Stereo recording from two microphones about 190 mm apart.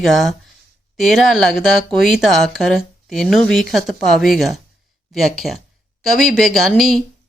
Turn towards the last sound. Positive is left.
turn(degrees=0)  # may be behind; listen again after turning